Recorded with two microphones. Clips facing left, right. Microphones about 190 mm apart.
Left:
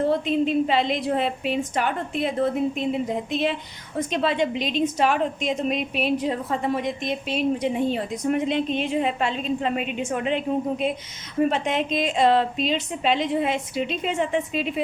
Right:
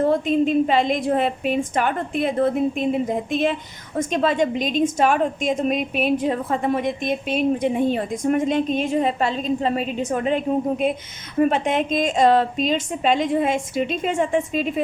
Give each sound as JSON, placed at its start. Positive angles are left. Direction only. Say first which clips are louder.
{"t": 0.0, "sound": "a woman's voice", "louder": "right 3 dB", "side_deg": -45}